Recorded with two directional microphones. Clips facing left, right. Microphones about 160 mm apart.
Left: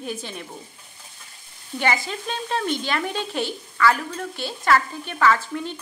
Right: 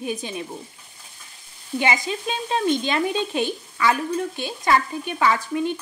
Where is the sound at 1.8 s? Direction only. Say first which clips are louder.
Right 1 dB; 15° right (ahead or behind).